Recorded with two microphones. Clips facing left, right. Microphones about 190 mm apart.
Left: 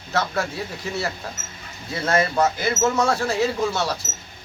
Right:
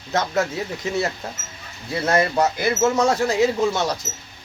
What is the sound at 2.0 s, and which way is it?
Speech, 15° right (ahead or behind).